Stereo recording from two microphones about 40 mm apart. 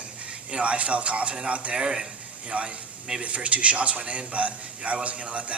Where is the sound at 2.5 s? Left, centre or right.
Right.